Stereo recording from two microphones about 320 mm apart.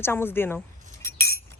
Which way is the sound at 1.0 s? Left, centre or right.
Centre.